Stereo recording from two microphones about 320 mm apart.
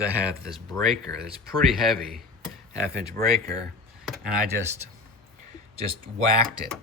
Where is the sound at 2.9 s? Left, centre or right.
Right.